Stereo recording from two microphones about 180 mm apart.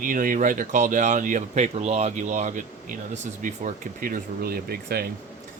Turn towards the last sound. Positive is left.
turn(degrees=-55)  # may be behind; listen again after turning